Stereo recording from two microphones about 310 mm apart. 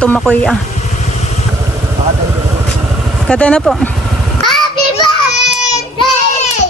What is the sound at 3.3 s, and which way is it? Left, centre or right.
Speech, centre.